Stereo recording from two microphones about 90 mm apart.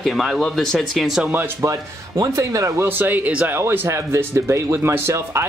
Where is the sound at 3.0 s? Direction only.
20° right (ahead or behind).